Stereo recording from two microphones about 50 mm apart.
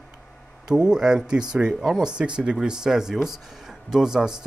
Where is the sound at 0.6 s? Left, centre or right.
Centre.